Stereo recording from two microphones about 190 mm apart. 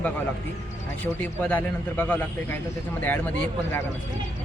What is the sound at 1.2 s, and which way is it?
Speech, 10° left (ahead or behind).